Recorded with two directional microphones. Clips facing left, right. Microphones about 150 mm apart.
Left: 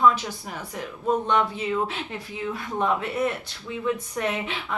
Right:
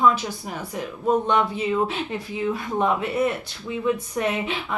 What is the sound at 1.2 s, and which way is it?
Speech, 15° right (ahead or behind).